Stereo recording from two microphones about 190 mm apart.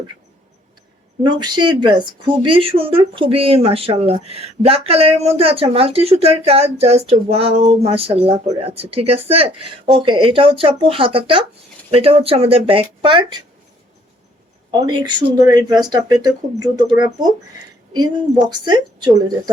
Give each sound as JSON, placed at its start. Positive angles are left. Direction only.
{"t": 1.2, "sound": "speech", "side_deg": -25}
{"t": 14.7, "sound": "speech", "side_deg": -25}